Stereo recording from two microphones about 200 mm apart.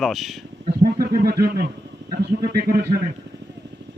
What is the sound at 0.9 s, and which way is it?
A man's voice, 50° right (ahead or behind).